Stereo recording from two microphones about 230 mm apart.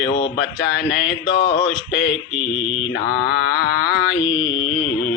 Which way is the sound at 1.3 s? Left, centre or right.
Left.